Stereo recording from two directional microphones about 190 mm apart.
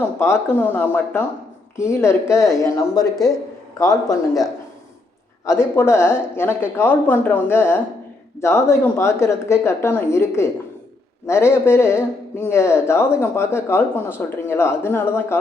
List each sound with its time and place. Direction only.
0.2 s speech: 15° left (ahead or behind)
5.5 s speech: 15° left (ahead or behind)